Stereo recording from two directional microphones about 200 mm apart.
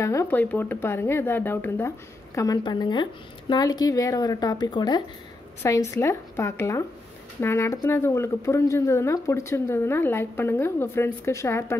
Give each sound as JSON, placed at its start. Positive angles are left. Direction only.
{"t": 0.0, "sound": "speech", "side_deg": 15}